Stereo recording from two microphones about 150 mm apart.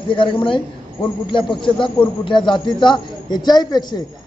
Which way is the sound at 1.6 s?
35° left (ahead or behind).